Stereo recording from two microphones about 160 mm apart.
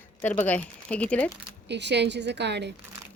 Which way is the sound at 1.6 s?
90° right.